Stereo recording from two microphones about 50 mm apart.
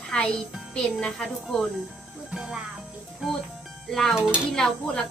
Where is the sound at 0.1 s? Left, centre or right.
Left.